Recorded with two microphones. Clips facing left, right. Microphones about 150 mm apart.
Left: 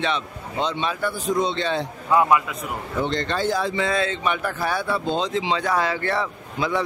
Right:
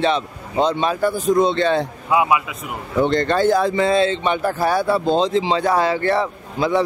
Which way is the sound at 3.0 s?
50° right (ahead or behind).